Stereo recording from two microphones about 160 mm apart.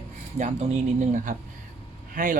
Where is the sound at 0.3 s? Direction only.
50° right (ahead or behind).